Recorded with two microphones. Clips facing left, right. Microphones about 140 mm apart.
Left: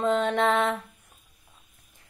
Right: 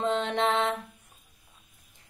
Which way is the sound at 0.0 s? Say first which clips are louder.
Left 4 dB; 20° right (ahead or behind).